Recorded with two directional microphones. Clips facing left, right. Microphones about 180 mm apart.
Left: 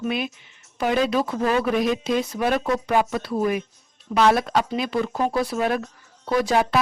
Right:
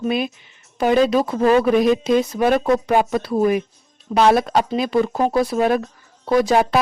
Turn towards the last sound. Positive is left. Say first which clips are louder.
# right 4 dB
turn(degrees=-40)  # may be behind; listen again after turning